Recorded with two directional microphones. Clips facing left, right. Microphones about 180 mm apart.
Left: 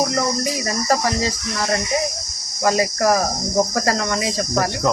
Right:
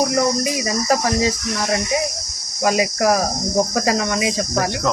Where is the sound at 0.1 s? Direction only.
10° right (ahead or behind).